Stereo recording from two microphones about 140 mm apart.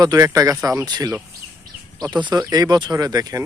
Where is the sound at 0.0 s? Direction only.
25° right (ahead or behind).